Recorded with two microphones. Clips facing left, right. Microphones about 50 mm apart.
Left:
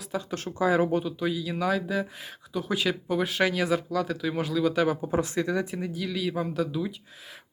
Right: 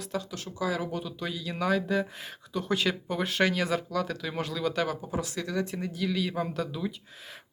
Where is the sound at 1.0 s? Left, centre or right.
Centre.